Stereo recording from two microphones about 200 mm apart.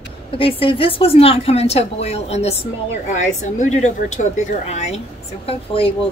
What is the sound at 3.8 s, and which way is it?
A woman's voice, 35° left (ahead or behind).